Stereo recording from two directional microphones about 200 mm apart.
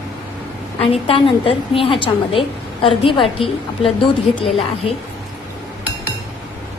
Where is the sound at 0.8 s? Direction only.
30° left (ahead or behind).